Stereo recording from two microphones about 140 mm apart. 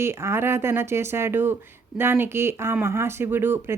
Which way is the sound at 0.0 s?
20° right (ahead or behind).